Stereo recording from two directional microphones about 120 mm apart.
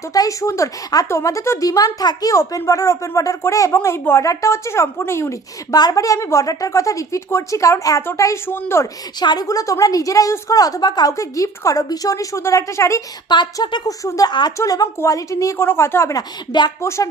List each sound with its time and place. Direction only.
0.1 s speech: 30° left (ahead or behind)
5.7 s speech: 35° left (ahead or behind)
9.2 s speech: 35° left (ahead or behind)
13.3 s a woman's voice: 40° left (ahead or behind)
16.8 s speech: 25° left (ahead or behind)